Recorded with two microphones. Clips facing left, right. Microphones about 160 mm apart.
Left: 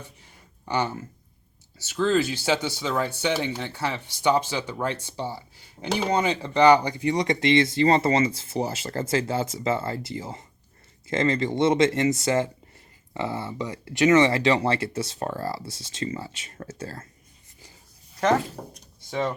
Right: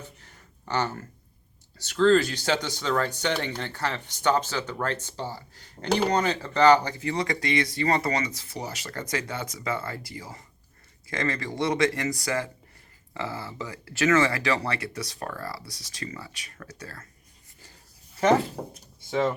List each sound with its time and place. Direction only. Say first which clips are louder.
0.2 s a sound: even; 10° left (ahead or behind)
1.8 s speech: right 3 dB; 10° left (ahead or behind); by 17.1 s 25° left (ahead or behind)
18.2 s speech: right 1 dB; 5° right (ahead or behind)